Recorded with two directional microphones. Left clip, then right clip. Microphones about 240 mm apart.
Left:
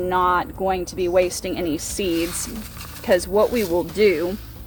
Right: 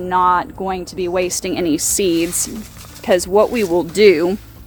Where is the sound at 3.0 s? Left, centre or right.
Right.